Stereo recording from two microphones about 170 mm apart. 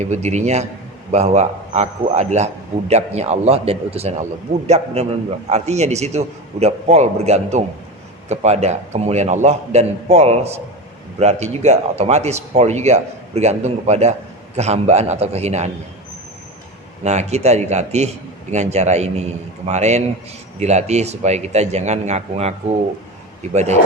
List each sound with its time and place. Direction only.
0.0 s a man's voice: 45° right (ahead or behind)
17.0 s speech: 40° right (ahead or behind)